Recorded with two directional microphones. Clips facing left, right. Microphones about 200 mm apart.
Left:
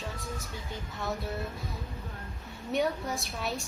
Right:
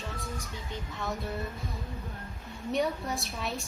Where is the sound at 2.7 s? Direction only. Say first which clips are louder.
Left 1 dB; centre (ahead or behind).